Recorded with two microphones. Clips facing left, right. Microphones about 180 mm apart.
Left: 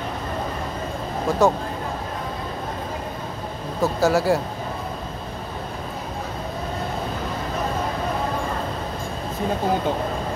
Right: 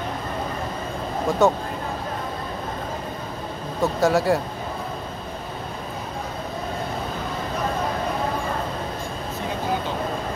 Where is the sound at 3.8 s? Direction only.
Centre (ahead or behind).